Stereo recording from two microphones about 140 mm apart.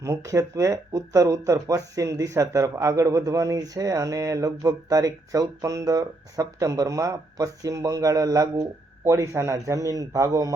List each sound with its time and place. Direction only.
0.0 s speech: 25° right (ahead or behind)